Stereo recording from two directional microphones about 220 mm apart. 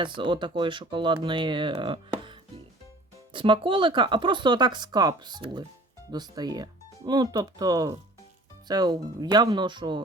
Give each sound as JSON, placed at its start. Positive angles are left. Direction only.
{"t": 0.0, "sound": "speech", "side_deg": -20}